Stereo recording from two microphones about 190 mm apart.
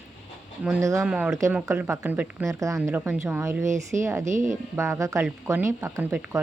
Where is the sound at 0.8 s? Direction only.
15° right (ahead or behind).